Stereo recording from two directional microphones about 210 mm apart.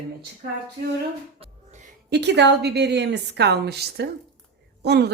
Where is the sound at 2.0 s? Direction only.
55° right (ahead or behind).